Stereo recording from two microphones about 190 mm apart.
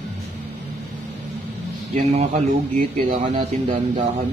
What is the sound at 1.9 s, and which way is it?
Speech, 35° right (ahead or behind).